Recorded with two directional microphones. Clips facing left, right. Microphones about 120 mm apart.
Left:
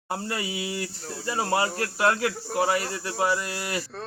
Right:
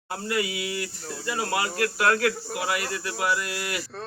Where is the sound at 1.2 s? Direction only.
30° left (ahead or behind).